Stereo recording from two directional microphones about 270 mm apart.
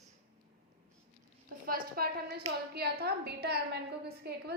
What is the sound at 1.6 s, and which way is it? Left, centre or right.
A woman's voice, right.